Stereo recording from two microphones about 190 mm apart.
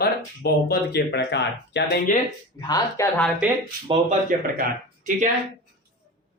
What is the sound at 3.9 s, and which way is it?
Speech, 40° right (ahead or behind).